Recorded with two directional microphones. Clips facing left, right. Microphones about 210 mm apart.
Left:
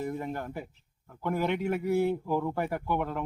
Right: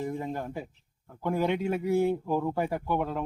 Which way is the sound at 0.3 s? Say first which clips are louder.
Right 2 dB; 15° right (ahead or behind).